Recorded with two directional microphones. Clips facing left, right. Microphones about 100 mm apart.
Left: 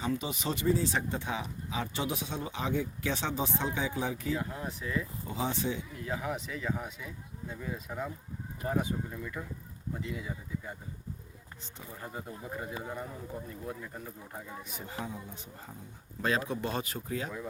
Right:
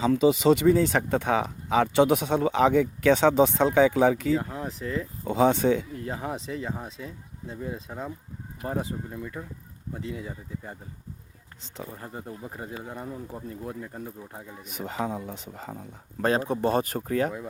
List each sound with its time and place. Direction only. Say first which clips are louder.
0.0 s speech: right 13 dB; 90° right
4.8 s speech: right 4 dB; 45° right (ahead or behind)
5.2 s speech: right 16 dB; 80° right
6.0 s speech: right 3 dB; 35° right (ahead or behind)
9.9 s speech: right 3 dB; 35° right (ahead or behind)
12.0 s speech: right 3 dB; 30° right (ahead or behind)
14.7 s speech: right 11 dB; 75° right (ahead or behind)
16.2 s speech: right 7 dB; 40° right (ahead or behind); by 17.3 s 55° right (ahead or behind)